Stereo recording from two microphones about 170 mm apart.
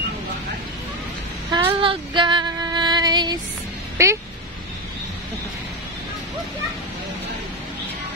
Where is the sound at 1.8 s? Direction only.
30° right (ahead or behind).